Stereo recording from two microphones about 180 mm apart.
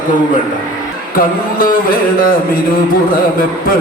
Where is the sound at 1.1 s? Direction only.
50° left (ahead or behind).